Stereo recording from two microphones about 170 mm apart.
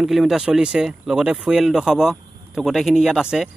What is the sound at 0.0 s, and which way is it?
Speech, centre (ahead or behind).